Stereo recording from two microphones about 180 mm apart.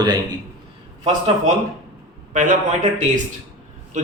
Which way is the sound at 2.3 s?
45° right (ahead or behind).